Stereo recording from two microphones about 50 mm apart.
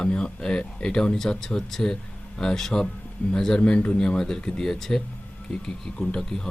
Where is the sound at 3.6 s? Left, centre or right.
Left.